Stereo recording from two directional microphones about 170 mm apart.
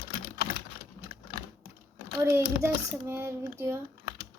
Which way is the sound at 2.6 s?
15° right (ahead or behind).